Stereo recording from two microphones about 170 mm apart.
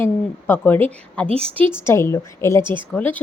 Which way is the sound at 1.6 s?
15° left (ahead or behind).